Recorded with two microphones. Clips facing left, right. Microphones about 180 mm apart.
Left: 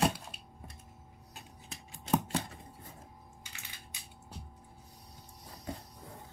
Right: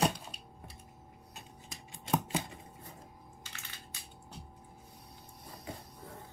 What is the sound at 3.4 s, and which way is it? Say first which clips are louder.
Crushing: right 1 dB; 15° left (ahead or behind).